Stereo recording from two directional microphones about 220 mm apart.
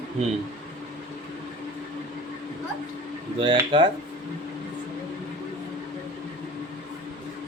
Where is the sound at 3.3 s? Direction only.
25° right (ahead or behind).